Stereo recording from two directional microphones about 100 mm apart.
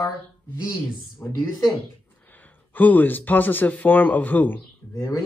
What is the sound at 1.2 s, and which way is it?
Speech, 20° left (ahead or behind).